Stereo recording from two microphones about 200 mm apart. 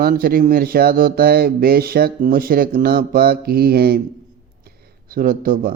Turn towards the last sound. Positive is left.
turn(degrees=-45)  # may be behind; listen again after turning